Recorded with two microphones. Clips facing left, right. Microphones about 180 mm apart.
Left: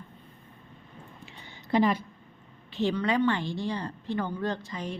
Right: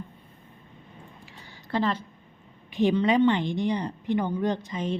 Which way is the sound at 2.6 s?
15° right (ahead or behind).